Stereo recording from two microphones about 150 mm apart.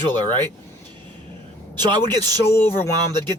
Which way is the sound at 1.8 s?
25° right (ahead or behind).